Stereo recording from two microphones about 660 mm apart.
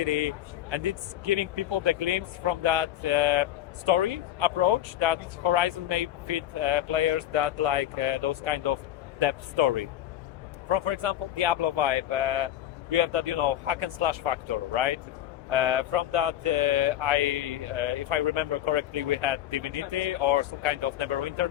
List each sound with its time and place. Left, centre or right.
0.0 s speech: right